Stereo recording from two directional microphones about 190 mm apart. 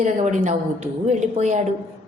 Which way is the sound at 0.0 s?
40° right (ahead or behind).